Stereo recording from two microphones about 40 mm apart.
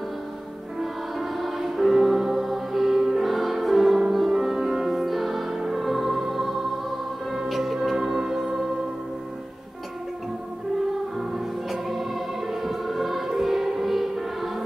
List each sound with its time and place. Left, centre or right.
0.7 s music: centre
3.0 s music: centre
3.3 s music: centre
11.1 s music: centre